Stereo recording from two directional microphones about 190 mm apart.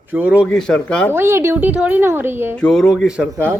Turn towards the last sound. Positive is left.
turn(degrees=-15)  # may be behind; listen again after turning